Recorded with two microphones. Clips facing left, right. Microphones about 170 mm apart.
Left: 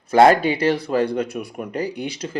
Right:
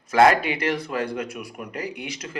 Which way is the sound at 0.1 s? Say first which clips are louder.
Left 4 dB; 35° left (ahead or behind).